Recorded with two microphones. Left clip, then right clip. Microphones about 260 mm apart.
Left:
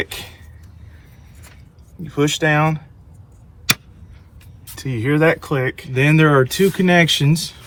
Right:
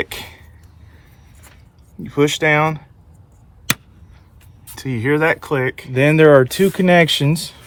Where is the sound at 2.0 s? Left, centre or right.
Right.